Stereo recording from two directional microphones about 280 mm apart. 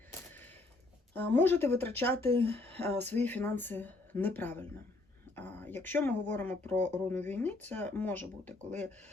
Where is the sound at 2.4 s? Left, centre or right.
Centre.